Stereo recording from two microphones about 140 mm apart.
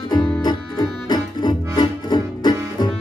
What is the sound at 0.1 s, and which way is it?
Music, 30° left (ahead or behind).